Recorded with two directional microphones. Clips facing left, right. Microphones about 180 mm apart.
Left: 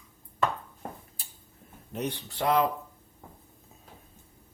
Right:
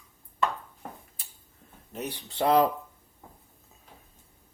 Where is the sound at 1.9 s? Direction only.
5° right (ahead or behind).